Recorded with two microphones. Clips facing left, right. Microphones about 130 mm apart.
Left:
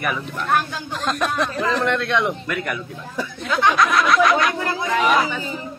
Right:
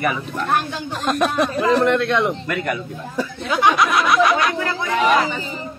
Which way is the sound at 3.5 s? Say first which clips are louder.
Right 1 dB; 20° right (ahead or behind).